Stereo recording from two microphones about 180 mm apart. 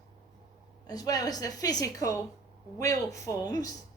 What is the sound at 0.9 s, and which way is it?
A woman's voice, 20° left (ahead or behind).